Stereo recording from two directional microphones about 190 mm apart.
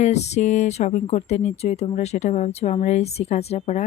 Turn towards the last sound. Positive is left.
turn(degrees=35)  # may be behind; listen again after turning